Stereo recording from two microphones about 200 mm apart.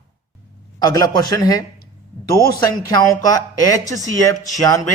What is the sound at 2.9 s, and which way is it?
Speech, 15° left (ahead or behind).